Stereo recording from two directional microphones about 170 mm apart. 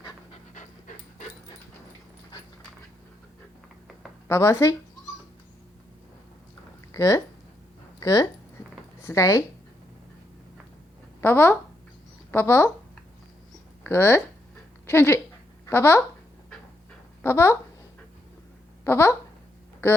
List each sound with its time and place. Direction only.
0.5 s pant: 45° left (ahead or behind)
4.3 s speech: 15° left (ahead or behind)
6.9 s speech: 15° left (ahead or behind)
11.2 s speech: 10° left (ahead or behind)
13.8 s speech: 15° left (ahead or behind)
17.2 s speech: 15° left (ahead or behind)
18.9 s speech: 15° left (ahead or behind)